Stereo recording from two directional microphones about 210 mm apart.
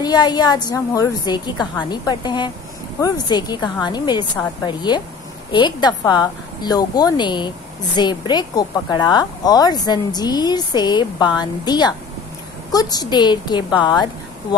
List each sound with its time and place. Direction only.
0.0 s a woman's voice: 20° left (ahead or behind)